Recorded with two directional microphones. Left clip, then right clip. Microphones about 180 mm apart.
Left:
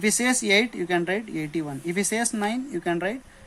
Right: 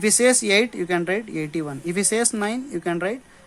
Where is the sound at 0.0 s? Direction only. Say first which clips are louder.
Right 5 dB; 30° right (ahead or behind).